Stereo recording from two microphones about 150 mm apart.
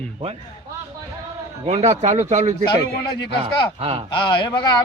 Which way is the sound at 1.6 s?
45° right (ahead or behind).